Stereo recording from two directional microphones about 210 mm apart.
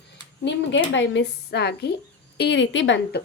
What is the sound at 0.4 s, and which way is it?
A woman's voice, 60° left (ahead or behind).